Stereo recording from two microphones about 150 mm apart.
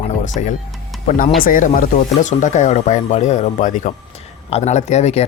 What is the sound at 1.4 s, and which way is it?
Speech, 65° left (ahead or behind).